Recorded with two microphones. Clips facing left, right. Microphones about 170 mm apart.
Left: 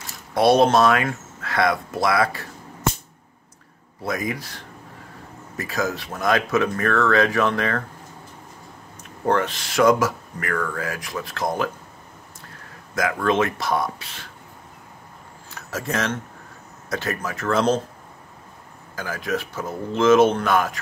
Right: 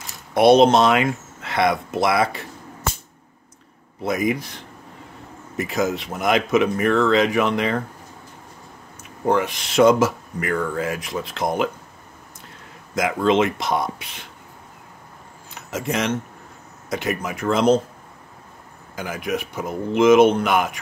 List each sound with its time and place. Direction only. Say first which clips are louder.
0.3 s speech: right 3 dB; 20° right (ahead or behind)
4.0 s speech: right 5 dB; 20° right (ahead or behind)
9.2 s speech: right 1 dB; 10° right (ahead or behind)
12.9 s speech: right 3 dB; 20° right (ahead or behind)
15.5 s speech: right 2 dB; 20° right (ahead or behind)
18.9 s speech: right 1 dB; 15° right (ahead or behind)